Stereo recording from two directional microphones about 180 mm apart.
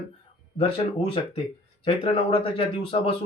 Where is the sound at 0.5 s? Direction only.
30° left (ahead or behind).